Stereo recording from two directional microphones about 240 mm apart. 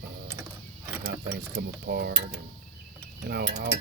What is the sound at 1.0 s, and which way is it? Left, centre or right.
Cutlery, right.